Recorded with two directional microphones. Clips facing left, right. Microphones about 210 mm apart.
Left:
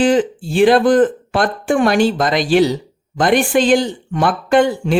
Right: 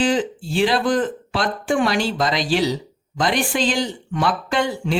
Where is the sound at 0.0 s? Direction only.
50° left (ahead or behind).